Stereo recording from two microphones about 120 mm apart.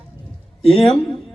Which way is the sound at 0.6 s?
55° left (ahead or behind).